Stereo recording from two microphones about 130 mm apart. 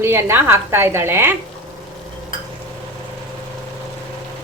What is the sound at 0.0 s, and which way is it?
A woman's voice, 20° right (ahead or behind).